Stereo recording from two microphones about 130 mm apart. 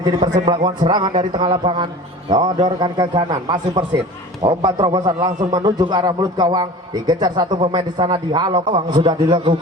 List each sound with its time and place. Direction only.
0.0 s a man's voice: 30° right (ahead or behind)